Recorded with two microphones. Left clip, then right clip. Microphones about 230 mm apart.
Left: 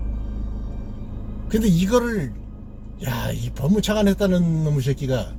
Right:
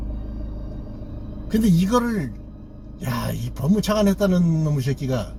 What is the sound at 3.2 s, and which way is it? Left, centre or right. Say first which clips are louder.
Speech: left 1 dB; centre.